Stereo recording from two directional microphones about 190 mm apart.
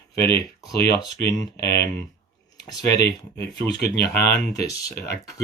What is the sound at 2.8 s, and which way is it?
Speech, 60° left (ahead or behind).